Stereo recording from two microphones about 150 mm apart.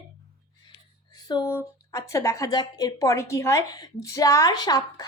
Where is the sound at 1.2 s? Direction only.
20° left (ahead or behind).